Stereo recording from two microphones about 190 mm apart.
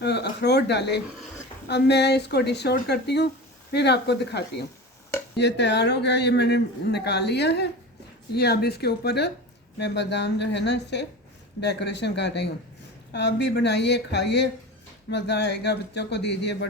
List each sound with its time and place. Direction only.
0.0 s speech: 60° left (ahead or behind)